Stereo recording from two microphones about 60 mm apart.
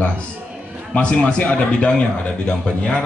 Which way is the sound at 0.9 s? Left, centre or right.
Left.